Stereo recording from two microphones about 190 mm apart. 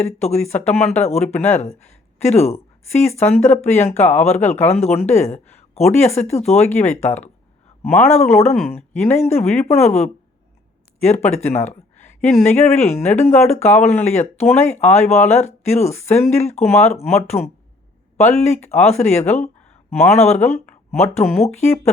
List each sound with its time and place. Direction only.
0.0 s speech: 35° left (ahead or behind)
0.6 s speech: 5° left (ahead or behind)
0.9 s speech: 35° left (ahead or behind)
12.2 s speech: 10° left (ahead or behind)
12.5 s speech: 35° left (ahead or behind)